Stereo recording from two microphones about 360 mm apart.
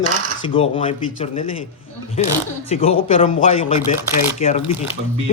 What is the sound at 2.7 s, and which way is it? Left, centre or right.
Speech, centre.